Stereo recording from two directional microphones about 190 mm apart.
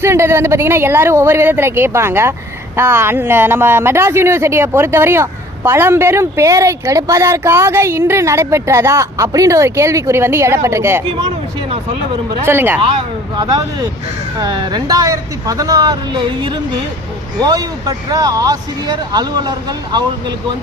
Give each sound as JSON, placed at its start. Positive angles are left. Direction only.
{"t": 0.0, "sound": "speech", "side_deg": -15}
{"t": 12.5, "sound": "speech", "side_deg": -10}
{"t": 13.3, "sound": "speech", "side_deg": -25}